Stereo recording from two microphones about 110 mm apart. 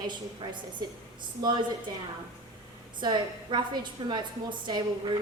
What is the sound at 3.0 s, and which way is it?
A woman's voice, 45° right (ahead or behind).